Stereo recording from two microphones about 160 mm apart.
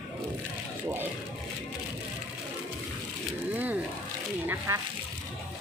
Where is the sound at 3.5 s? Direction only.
10° right (ahead or behind).